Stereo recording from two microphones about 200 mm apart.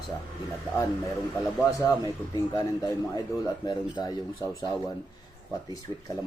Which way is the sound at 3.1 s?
20° left (ahead or behind).